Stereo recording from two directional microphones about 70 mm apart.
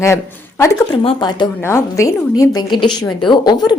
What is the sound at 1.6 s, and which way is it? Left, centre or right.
Speech, left.